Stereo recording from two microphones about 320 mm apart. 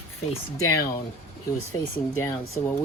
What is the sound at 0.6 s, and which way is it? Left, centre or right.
Speech, left.